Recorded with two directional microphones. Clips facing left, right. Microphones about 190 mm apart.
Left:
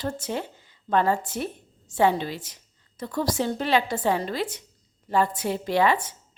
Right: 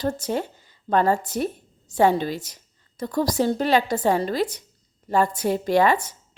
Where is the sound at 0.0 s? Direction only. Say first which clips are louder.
Right 4 dB; 40° right (ahead or behind).